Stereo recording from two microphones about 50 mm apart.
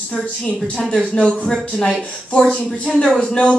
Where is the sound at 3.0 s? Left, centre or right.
Centre.